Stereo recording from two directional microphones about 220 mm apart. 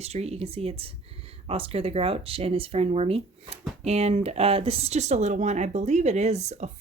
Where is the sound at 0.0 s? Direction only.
30° right (ahead or behind).